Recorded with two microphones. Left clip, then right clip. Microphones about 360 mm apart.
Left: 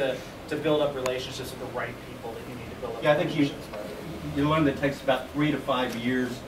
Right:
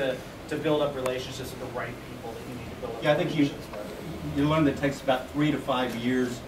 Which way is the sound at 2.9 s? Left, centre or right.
Centre.